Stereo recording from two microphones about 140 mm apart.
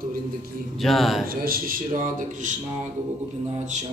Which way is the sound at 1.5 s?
90° right.